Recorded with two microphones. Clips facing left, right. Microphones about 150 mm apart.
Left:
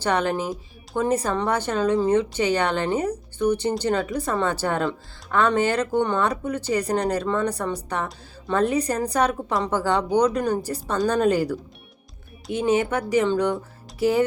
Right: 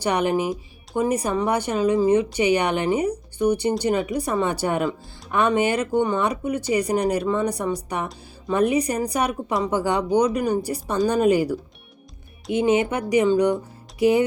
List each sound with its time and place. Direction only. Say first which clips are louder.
0.0 s a woman's voice: right 2 dB; 15° right (ahead or behind)
9.5 s speech: right 1 dB; centre (ahead or behind)
9.7 s a woman's voice: right 1 dB; 15° right (ahead or behind)